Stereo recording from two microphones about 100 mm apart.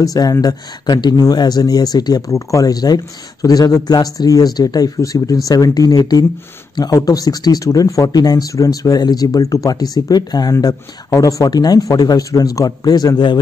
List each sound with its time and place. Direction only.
0.0 s speech: 35° left (ahead or behind)